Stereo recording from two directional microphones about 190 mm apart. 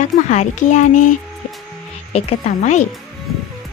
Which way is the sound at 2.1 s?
40° left (ahead or behind).